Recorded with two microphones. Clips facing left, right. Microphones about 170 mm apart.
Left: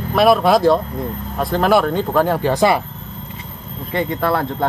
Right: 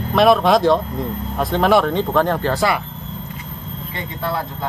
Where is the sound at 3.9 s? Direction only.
65° left (ahead or behind).